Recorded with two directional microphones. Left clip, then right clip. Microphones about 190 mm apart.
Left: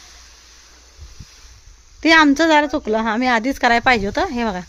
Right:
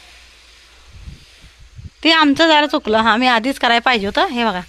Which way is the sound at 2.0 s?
10° left (ahead or behind).